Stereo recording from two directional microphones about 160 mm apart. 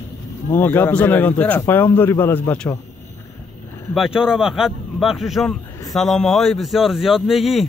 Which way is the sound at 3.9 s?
5° right (ahead or behind).